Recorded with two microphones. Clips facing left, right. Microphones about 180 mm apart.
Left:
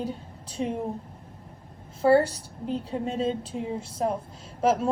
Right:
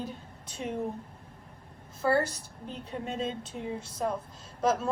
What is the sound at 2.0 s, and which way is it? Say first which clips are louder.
A woman's voice: left 7 dB; 30° left (ahead or behind).